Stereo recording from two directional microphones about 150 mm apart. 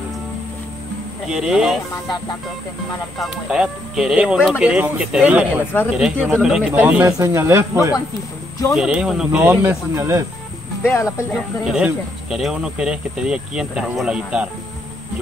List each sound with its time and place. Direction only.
1.2 s speech: 5° right (ahead or behind)
3.2 s speech: 5° right (ahead or behind)
8.7 s speech: 5° right (ahead or behind); by 10.2 s 20° right (ahead or behind)
10.8 s speech: 20° left (ahead or behind)
11.6 s speech: 5° right (ahead or behind)